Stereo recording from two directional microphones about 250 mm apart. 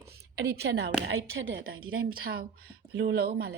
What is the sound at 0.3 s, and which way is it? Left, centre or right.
A woman's voice, right.